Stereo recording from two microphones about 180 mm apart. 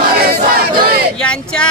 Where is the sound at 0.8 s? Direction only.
60° right (ahead or behind).